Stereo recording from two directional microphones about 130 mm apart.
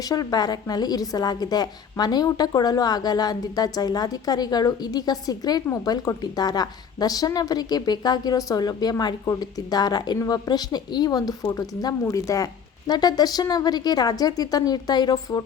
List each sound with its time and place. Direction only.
0.1 s a woman's voice: 30° left (ahead or behind)